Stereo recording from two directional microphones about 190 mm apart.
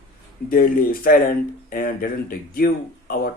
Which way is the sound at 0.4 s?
50° left (ahead or behind).